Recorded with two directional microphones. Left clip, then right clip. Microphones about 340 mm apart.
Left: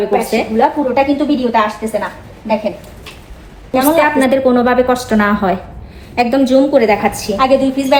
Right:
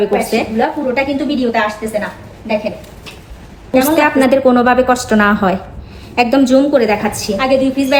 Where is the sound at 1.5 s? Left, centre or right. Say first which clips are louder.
Left 2 dB; centre.